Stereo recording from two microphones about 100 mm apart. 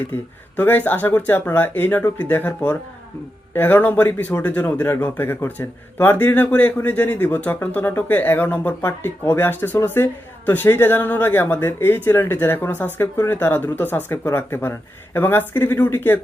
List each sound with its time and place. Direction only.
0.5 s a woman's voice: 15° left (ahead or behind)
3.5 s a woman's voice: 20° left (ahead or behind)